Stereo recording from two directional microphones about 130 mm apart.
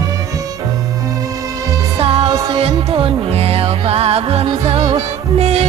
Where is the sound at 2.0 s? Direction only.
45° right (ahead or behind).